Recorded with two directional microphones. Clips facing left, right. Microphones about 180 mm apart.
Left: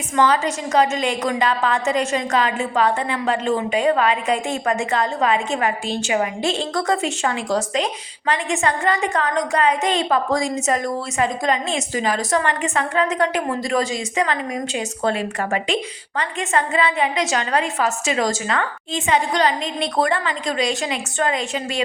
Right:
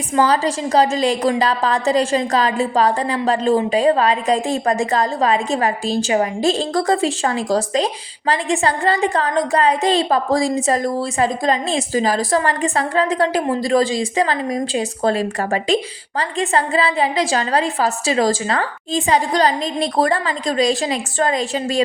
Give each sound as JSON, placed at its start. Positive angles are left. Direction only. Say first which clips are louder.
{"t": 0.2, "sound": "a woman's voice", "louder": "right 2 dB", "side_deg": -35}